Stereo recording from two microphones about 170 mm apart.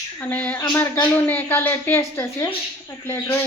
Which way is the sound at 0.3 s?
10° left (ahead or behind).